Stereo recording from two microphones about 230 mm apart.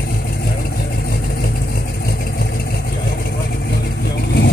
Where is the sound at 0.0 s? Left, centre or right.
Left.